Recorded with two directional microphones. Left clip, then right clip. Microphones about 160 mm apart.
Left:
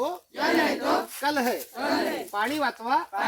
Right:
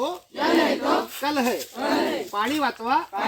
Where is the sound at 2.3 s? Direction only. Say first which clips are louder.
Right 2 dB; 25° left (ahead or behind).